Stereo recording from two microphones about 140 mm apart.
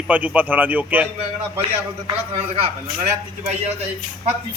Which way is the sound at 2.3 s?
50° right (ahead or behind).